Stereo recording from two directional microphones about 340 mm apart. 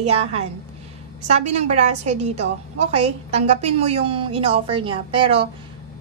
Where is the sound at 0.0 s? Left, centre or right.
Centre.